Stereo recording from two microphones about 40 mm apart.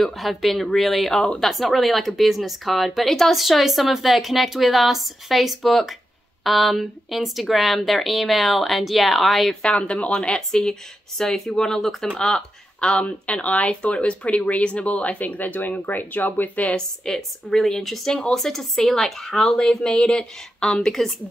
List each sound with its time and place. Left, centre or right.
0.0 s a woman's voice: centre
9.6 s a woman's voice: left
13.0 s speech: left
16.6 s a woman's voice: centre